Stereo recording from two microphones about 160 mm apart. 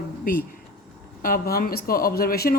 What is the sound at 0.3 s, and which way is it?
Speech, 65° left (ahead or behind).